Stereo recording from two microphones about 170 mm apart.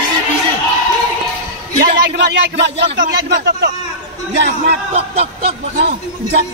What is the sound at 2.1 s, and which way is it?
Speech, 90° right.